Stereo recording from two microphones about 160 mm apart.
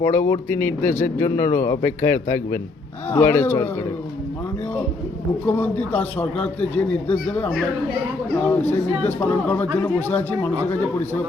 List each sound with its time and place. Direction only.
0.0 s speech: 15° left (ahead or behind)
5.5 s speech: 10° left (ahead or behind)
8.4 s speech: 15° left (ahead or behind)